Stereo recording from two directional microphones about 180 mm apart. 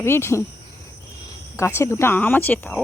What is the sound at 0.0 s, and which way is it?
Speech, 15° left (ahead or behind).